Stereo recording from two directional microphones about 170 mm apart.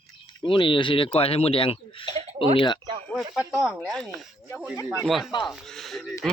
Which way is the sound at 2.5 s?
30° left (ahead or behind).